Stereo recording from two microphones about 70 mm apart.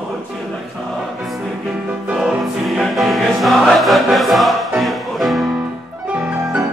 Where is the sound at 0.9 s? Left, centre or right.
Centre.